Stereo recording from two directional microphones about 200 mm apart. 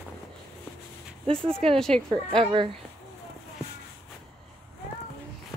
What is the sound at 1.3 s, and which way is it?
Speech, 5° left (ahead or behind).